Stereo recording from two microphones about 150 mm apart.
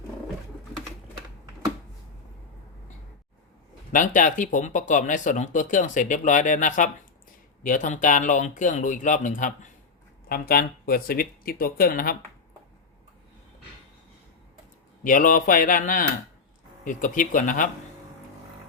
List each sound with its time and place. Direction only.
3.9 s speech: 60° left (ahead or behind)
10.2 s speech: 85° left
15.0 s speech: 65° left (ahead or behind)